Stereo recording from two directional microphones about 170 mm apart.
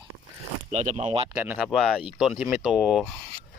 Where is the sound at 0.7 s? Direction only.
40° right (ahead or behind).